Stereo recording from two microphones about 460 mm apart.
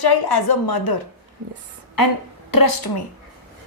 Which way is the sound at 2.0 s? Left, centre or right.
Left.